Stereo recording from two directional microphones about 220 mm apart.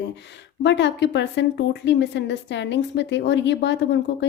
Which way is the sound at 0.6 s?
55° left (ahead or behind).